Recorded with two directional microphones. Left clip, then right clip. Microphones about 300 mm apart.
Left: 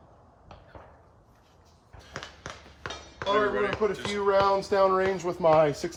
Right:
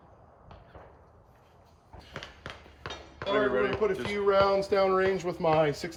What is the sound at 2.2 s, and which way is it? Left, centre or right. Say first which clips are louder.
Music: left 2 dB; left.